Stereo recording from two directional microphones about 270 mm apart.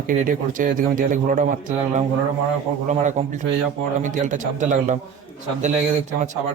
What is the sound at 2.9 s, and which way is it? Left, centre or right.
Speech, right.